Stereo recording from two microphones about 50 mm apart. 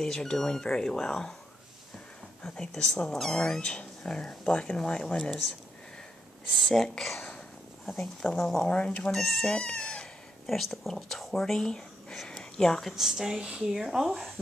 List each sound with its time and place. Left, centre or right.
0.0 s speech: centre
2.4 s speech: centre
6.5 s speech: centre
8.6 s speech: centre
10.4 s speech: centre
12.9 s speech: centre